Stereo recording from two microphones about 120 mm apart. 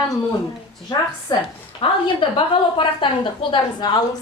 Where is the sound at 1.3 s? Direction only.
40° left (ahead or behind).